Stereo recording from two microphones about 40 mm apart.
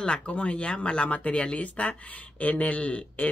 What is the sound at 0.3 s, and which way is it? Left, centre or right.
Speech, left.